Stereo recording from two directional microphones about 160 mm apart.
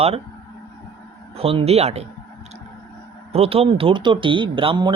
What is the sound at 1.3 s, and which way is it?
Speech, 35° right (ahead or behind).